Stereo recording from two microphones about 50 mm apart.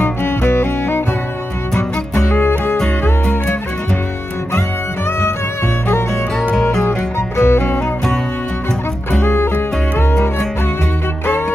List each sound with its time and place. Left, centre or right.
0.0 s music: left
2.4 s music: left
2.8 s music: left
6.5 s music: centre
6.9 s music: left
9.2 s music: left